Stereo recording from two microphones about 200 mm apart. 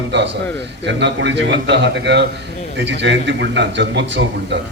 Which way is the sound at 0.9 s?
60° right (ahead or behind).